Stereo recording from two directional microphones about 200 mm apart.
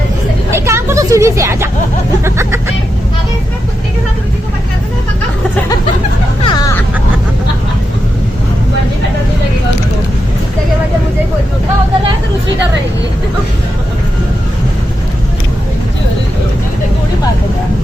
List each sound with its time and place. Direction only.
0.5 s vehicle: 15° right (ahead or behind)
6.4 s vehicle: 20° left (ahead or behind)